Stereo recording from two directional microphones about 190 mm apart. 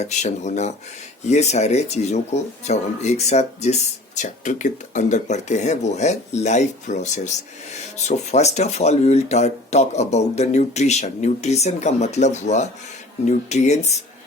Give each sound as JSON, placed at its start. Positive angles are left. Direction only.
{"t": 0.0, "sound": "speech", "side_deg": 40}